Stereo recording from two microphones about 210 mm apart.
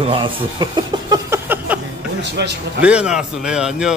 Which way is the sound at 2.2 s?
55° right (ahead or behind).